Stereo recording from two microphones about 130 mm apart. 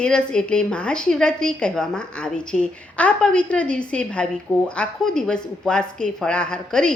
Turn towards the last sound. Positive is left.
turn(degrees=5)  # may be behind; listen again after turning